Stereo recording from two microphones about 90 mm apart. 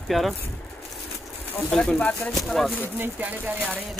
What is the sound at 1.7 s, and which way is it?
Speech, 10° left (ahead or behind).